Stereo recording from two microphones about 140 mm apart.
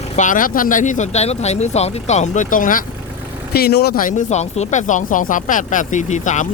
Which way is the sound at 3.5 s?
90° left.